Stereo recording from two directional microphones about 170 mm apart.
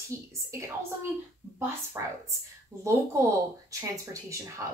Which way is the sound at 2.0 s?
15° right (ahead or behind).